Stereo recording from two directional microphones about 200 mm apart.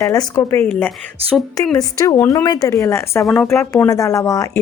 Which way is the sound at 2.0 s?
15° left (ahead or behind).